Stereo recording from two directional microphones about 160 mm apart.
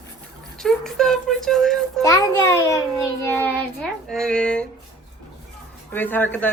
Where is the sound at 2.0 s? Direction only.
20° left (ahead or behind).